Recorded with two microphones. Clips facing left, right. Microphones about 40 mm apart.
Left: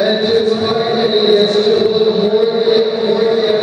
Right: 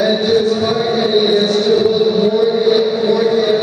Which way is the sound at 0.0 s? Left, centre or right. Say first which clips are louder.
Left 1 dB; centre.